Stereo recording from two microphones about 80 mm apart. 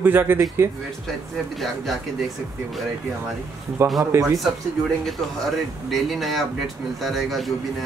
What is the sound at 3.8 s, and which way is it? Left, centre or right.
Speech, right.